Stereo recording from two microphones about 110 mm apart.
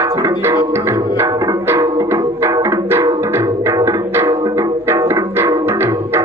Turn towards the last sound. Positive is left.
turn(degrees=-25)  # may be behind; listen again after turning